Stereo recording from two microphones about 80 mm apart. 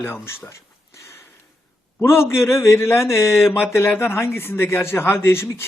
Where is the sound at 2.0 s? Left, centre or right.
Left.